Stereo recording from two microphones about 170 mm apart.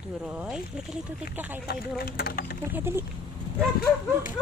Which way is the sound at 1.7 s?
65° left (ahead or behind).